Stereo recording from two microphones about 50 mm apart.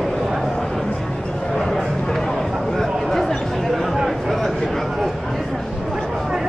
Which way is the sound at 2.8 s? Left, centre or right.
Centre.